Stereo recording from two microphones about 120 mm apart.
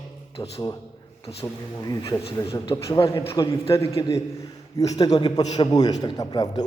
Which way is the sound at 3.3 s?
25° left (ahead or behind).